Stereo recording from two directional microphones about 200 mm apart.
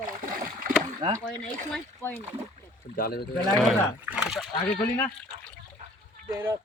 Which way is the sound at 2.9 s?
50° left (ahead or behind).